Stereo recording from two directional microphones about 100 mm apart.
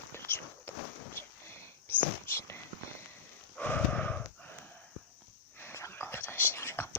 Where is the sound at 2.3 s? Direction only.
25° left (ahead or behind).